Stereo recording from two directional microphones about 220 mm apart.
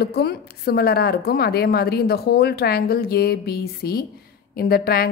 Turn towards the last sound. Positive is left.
turn(degrees=45)  # may be behind; listen again after turning